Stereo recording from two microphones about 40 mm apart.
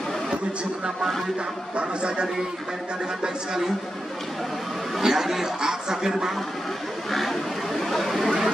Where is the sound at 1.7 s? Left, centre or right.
Right.